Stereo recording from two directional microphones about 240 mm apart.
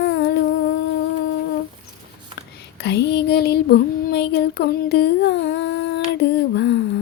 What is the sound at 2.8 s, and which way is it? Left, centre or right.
Female singing, left.